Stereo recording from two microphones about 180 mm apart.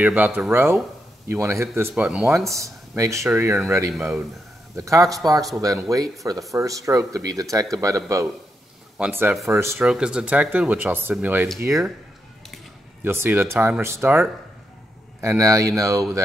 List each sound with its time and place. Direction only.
0.0 s speech: 10° right (ahead or behind)
2.0 s speech: 5° right (ahead or behind)
2.3 s speech: 15° right (ahead or behind)
13.0 s speech: 10° right (ahead or behind)